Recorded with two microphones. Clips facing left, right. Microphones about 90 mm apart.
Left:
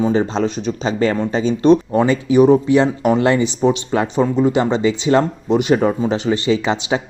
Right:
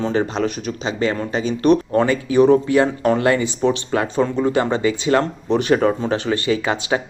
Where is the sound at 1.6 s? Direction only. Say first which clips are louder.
Left 2 dB; 20° left (ahead or behind).